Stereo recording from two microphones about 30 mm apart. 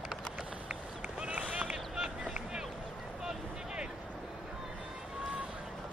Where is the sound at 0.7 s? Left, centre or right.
Right.